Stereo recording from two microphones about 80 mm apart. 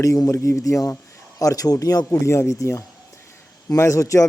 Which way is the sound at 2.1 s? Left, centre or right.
Left.